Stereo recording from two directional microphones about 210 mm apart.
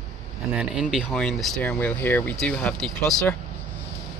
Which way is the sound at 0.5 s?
Centre (ahead or behind).